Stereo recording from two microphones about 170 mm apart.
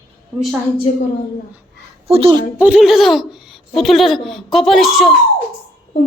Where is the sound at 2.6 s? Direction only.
5° right (ahead or behind).